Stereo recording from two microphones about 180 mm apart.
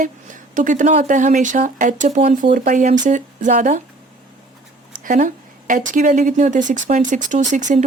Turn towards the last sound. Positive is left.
turn(degrees=-40)  # may be behind; listen again after turning